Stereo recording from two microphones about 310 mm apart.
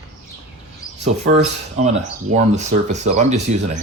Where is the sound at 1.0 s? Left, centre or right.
Right.